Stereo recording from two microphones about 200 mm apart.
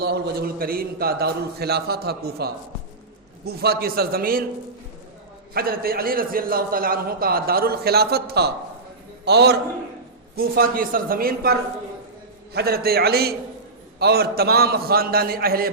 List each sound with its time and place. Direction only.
0.0 s a man's voice: 50° right (ahead or behind)
5.5 s a man's voice: 50° right (ahead or behind)
12.5 s a man's voice: 50° right (ahead or behind)